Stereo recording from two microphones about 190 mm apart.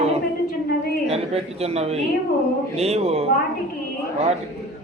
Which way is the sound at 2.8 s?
35° right (ahead or behind).